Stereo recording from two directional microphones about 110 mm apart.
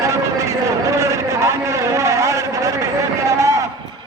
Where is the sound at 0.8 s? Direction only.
25° right (ahead or behind).